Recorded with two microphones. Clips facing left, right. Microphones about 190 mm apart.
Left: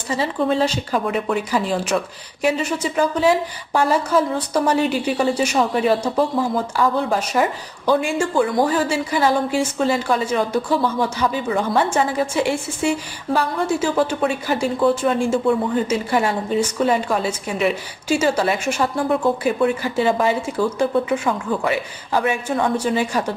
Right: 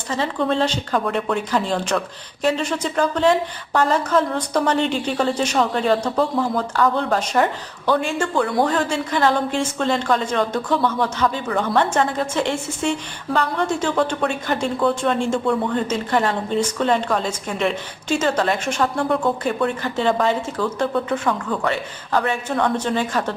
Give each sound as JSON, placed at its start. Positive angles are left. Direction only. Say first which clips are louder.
{"t": 0.1, "sound": "speech", "louder": "left 1 dB", "side_deg": 5}